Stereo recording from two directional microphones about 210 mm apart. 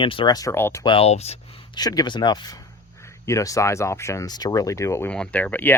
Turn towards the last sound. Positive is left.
turn(degrees=10)  # may be behind; listen again after turning